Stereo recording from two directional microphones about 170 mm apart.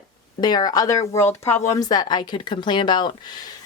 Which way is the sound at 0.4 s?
25° left (ahead or behind).